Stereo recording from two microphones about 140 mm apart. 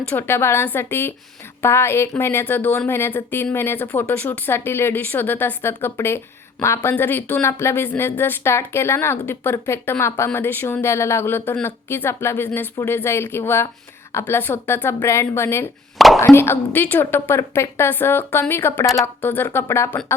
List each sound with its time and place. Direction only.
0.0 s speech: 15° left (ahead or behind)